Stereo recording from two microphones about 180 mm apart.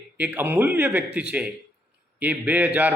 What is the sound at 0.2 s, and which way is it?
A man's voice, 10° right (ahead or behind).